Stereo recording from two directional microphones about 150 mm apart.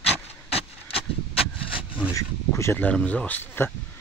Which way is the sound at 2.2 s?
20° left (ahead or behind).